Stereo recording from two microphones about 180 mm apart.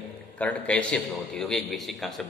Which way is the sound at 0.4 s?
10° left (ahead or behind).